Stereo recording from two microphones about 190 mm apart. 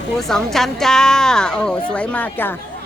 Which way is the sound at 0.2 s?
Centre (ahead or behind).